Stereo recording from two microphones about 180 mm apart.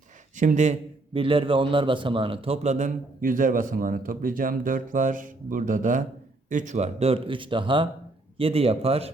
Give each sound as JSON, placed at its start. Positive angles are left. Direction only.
{"t": 0.3, "sound": "a man's voice", "side_deg": -45}